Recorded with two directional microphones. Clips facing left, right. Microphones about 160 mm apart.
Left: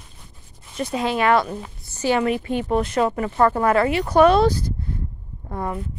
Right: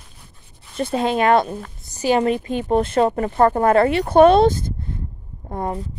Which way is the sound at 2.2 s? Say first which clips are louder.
Right 2 dB; 30° right (ahead or behind).